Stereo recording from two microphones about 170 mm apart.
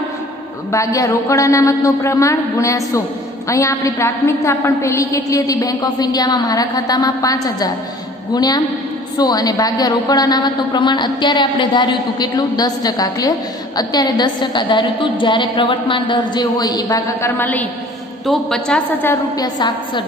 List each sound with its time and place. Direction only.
0.7 s a woman's voice: 20° left (ahead or behind)
19.3 s a woman's voice: 25° left (ahead or behind)